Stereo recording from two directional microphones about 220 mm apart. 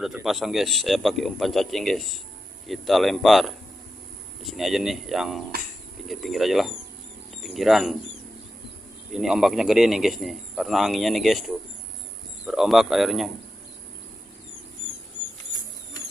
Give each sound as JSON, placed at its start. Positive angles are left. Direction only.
{"t": 0.0, "sound": "speech", "side_deg": 0}
{"t": 9.1, "sound": "speech", "side_deg": 0}